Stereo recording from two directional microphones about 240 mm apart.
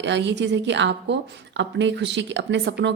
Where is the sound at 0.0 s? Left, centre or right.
Right.